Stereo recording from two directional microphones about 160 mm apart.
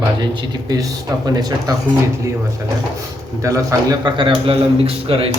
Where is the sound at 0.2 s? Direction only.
25° right (ahead or behind).